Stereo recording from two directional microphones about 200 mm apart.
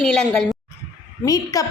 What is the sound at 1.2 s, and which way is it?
Speech, 15° left (ahead or behind).